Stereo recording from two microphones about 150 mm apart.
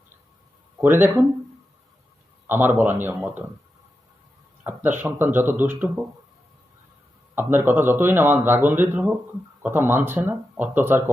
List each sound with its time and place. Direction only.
0.8 s speech: 15° right (ahead or behind)
2.5 s speech: 15° right (ahead or behind)
4.6 s speech: 15° right (ahead or behind)
7.3 s speech: 15° right (ahead or behind)